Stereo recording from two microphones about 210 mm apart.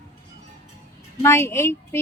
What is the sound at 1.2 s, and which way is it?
Speech, 10° left (ahead or behind).